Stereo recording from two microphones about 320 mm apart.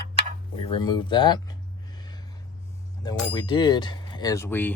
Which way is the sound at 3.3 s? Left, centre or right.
Centre.